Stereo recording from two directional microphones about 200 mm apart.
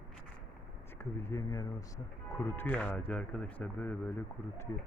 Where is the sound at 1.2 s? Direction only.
15° left (ahead or behind).